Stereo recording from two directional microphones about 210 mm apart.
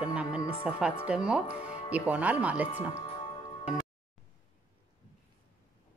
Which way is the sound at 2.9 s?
25° left (ahead or behind).